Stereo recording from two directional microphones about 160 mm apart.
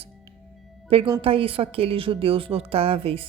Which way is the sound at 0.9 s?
35° right (ahead or behind).